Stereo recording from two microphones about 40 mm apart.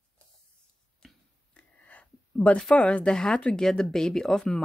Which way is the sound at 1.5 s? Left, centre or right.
Left.